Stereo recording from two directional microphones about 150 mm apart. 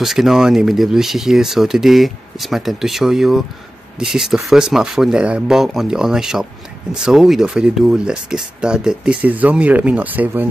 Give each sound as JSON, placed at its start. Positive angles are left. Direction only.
{"t": 0.0, "sound": "speech", "side_deg": 0}